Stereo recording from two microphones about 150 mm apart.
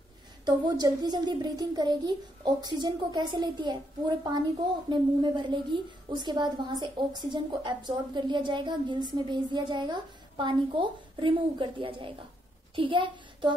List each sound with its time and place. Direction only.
0.5 s a woman's voice: 25° right (ahead or behind)